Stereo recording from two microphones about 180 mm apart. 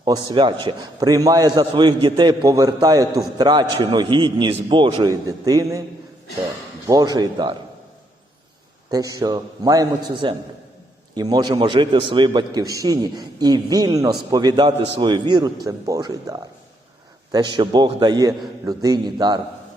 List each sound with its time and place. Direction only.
0.0 s a man's voice: 25° right (ahead or behind)
6.8 s a man's voice: 20° right (ahead or behind)
8.9 s a man's voice: 20° right (ahead or behind)